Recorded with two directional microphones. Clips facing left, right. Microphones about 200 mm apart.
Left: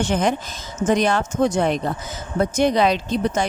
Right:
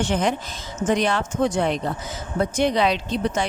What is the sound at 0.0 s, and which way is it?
Speech, 45° left (ahead or behind).